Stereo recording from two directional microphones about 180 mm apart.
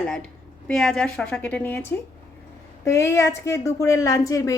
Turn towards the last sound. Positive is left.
turn(degrees=15)  # may be behind; listen again after turning